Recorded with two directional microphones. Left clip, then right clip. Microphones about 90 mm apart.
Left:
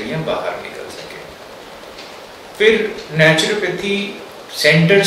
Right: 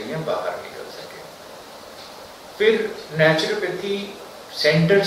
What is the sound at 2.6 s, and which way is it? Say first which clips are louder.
Speech: left 5 dB; 25° left (ahead or behind).